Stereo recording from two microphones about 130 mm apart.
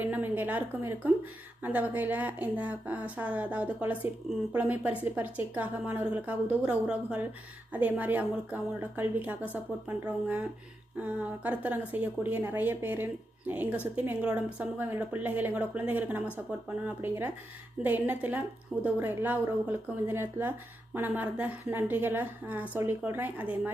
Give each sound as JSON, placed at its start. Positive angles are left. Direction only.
{"t": 0.0, "sound": "a woman's voice", "side_deg": -15}